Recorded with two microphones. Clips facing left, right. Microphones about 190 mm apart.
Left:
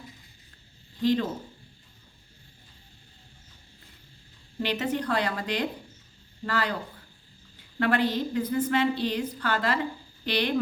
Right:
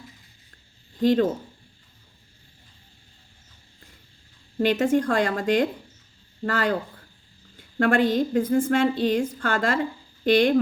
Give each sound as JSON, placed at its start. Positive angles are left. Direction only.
{"t": 1.0, "sound": "a woman's voice", "side_deg": -50}
{"t": 4.5, "sound": "a woman's voice", "side_deg": -50}
{"t": 7.8, "sound": "a woman's voice", "side_deg": -50}